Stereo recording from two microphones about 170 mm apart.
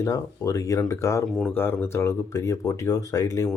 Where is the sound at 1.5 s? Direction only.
15° left (ahead or behind).